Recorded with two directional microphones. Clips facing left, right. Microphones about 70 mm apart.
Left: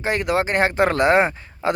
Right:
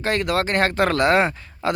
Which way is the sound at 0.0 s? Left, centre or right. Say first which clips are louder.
Left 1 dB; centre.